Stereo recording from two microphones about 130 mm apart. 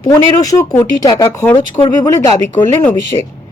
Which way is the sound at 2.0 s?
20° left (ahead or behind).